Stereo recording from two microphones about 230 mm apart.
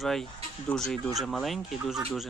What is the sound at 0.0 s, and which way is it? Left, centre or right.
Speech, centre.